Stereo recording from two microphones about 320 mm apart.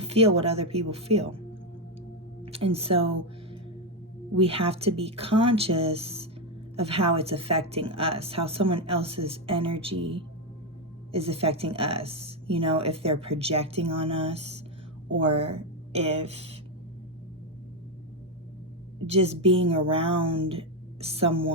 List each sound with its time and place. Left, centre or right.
0.0 s speech: centre
2.4 s speech: centre
4.4 s a woman's voice: centre
19.1 s a woman's voice: centre